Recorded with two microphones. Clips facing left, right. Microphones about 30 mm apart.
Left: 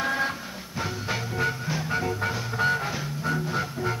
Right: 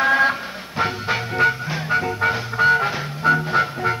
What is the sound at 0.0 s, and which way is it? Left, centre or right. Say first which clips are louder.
Music: right 10 dB; right.